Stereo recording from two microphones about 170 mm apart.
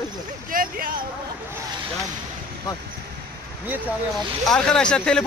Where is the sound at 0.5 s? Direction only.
55° right (ahead or behind).